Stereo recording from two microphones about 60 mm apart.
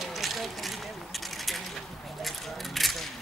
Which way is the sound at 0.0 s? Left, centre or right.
Centre.